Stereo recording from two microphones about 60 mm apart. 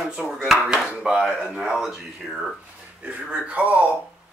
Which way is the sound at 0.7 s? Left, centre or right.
Centre.